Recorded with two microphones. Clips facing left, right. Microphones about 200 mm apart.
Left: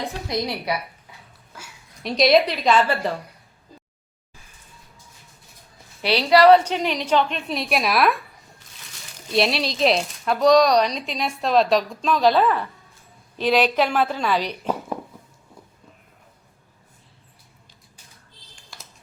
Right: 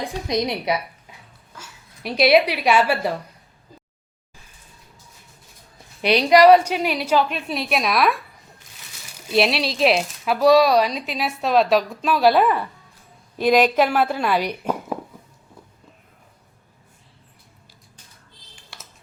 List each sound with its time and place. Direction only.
0.3 s a woman's voice: 20° right (ahead or behind)
2.0 s a woman's voice: 5° right (ahead or behind)
6.0 s a woman's voice: 20° right (ahead or behind); by 8.2 s centre (ahead or behind)
9.3 s a woman's voice: centre (ahead or behind)